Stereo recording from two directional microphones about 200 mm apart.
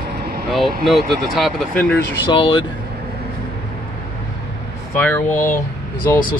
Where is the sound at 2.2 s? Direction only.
25° left (ahead or behind).